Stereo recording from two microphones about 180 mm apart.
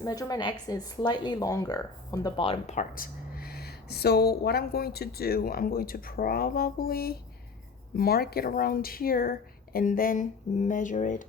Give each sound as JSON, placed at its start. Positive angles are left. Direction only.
{"t": 0.0, "sound": "speech", "side_deg": 20}
{"t": 2.7, "sound": "speech", "side_deg": 50}